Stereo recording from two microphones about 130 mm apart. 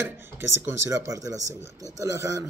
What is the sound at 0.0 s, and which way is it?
A man's voice, 20° right (ahead or behind).